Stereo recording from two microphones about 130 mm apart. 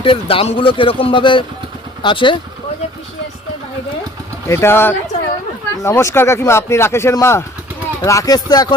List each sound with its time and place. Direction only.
0.0 s speech: 45° left (ahead or behind)
4.4 s speech: 20° left (ahead or behind)